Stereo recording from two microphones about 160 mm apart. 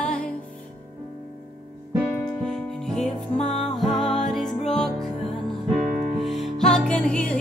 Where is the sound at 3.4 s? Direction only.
45° left (ahead or behind).